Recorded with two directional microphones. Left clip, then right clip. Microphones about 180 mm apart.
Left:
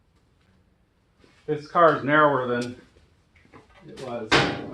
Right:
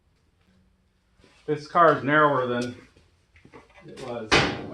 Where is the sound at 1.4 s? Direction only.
40° right (ahead or behind).